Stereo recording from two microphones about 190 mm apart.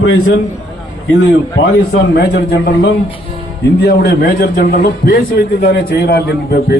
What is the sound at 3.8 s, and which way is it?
A man's voice, 55° left (ahead or behind).